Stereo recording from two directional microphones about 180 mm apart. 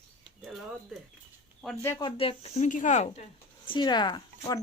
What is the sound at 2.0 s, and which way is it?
Speech, 30° left (ahead or behind).